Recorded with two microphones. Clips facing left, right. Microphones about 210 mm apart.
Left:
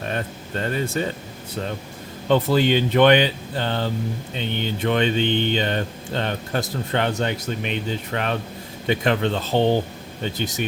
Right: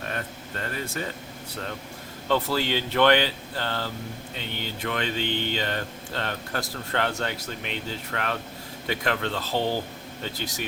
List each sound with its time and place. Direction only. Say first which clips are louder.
0.1 s speech: left 6 dB; 25° left (ahead or behind)
2.2 s mantra: left 7 dB; 20° left (ahead or behind)